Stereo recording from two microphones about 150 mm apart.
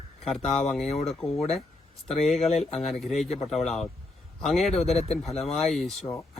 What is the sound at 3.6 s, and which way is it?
Speech, centre (ahead or behind).